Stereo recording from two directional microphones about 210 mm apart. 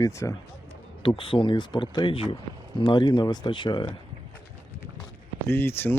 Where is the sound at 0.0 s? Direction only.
15° left (ahead or behind).